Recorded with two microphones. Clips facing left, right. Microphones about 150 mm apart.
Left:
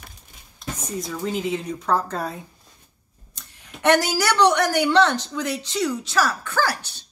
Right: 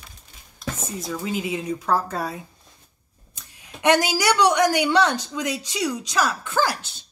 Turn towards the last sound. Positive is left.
turn(degrees=-20)  # may be behind; listen again after turning